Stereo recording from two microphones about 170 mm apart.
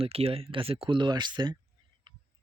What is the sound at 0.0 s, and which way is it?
Speech, 35° right (ahead or behind).